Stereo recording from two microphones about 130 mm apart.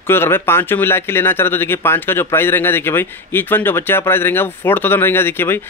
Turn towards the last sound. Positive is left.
turn(degrees=15)  # may be behind; listen again after turning